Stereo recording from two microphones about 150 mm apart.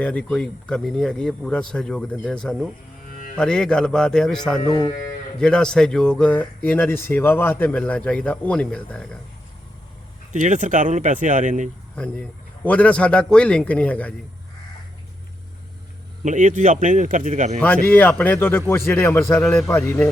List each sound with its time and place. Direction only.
0.0 s speech: 10° left (ahead or behind)
10.3 s speech: 55° right (ahead or behind)
11.9 s speech: 5° left (ahead or behind)
16.2 s speech: 55° right (ahead or behind)
17.8 s speech: 10° left (ahead or behind)